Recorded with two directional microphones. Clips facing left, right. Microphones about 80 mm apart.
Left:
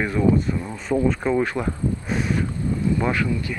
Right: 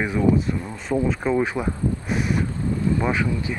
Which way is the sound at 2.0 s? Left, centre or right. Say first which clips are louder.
Even; centre.